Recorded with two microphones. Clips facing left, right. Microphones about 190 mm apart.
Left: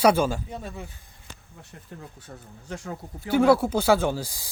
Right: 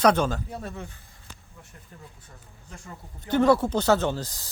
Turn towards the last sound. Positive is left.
turn(degrees=10)  # may be behind; listen again after turning